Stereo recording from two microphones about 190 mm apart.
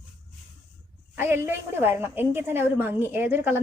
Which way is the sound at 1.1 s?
10° right (ahead or behind).